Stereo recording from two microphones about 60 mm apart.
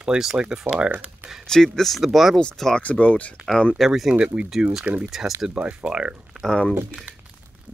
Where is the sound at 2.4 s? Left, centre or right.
Centre.